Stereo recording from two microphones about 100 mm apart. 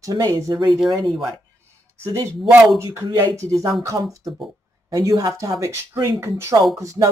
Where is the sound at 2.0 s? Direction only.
30° right (ahead or behind).